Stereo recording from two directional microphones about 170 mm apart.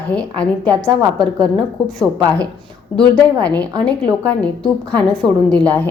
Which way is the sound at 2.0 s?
5° left (ahead or behind).